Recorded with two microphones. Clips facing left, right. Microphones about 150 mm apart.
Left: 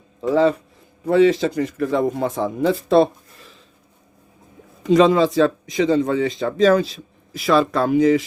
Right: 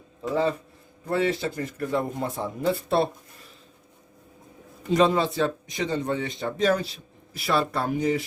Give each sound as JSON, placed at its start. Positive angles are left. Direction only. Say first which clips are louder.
{"t": 0.2, "sound": "speech", "louder": "left 8 dB", "side_deg": 90}
{"t": 4.8, "sound": "speech", "louder": "left 7 dB", "side_deg": 90}